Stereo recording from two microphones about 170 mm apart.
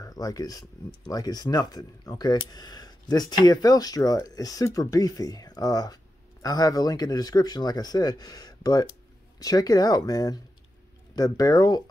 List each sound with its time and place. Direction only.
0.0 s speech: 20° left (ahead or behind)